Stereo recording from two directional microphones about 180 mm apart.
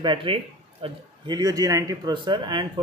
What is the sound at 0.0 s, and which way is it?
Speech, 30° right (ahead or behind).